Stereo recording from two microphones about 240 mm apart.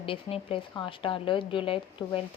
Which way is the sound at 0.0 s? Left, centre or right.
Left.